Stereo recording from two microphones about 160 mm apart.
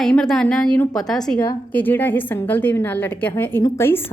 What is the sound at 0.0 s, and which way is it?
A woman's voice, 5° left (ahead or behind).